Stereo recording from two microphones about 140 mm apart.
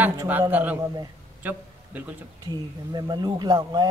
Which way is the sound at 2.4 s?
30° right (ahead or behind).